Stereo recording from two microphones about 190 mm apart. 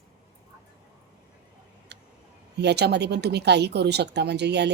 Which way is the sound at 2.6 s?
60° right (ahead or behind).